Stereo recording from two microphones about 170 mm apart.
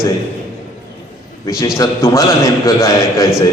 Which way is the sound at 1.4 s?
20° left (ahead or behind).